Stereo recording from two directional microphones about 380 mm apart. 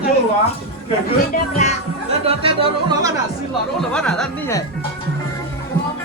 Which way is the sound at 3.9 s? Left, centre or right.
Centre.